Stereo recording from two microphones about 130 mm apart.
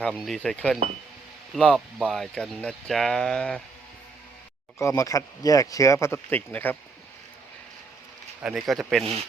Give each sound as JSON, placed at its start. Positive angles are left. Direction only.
{"t": 0.0, "sound": "speech", "side_deg": 0}
{"t": 4.8, "sound": "speech", "side_deg": 20}
{"t": 8.4, "sound": "speech", "side_deg": -5}